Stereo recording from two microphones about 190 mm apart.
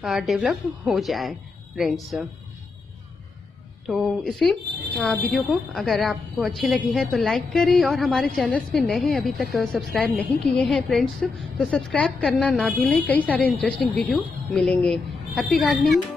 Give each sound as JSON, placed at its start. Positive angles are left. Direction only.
{"t": 0.0, "sound": "speech", "side_deg": 0}
{"t": 3.8, "sound": "speech", "side_deg": 0}